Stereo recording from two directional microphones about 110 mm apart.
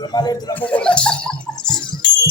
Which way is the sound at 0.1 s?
40° left (ahead or behind).